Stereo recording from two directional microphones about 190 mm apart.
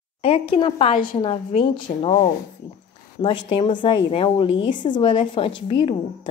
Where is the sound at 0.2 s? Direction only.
30° left (ahead or behind).